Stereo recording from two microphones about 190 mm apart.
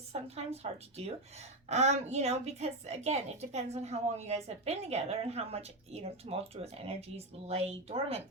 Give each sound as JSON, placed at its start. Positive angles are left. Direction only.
{"t": 0.1, "sound": "a woman's voice", "side_deg": -35}